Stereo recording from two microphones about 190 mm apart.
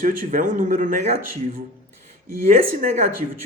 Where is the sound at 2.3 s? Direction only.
50° right (ahead or behind).